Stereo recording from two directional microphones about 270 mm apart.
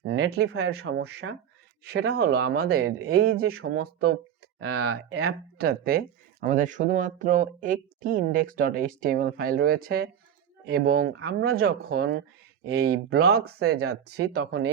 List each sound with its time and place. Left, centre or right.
0.0 s speech: right
3.1 s speech: right
4.7 s speech: right
5.5 s speech: right
13.4 s speech: right
14.3 s speech: right